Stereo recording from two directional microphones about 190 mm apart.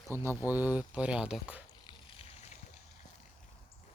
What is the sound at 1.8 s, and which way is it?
Vehicle, 30° left (ahead or behind).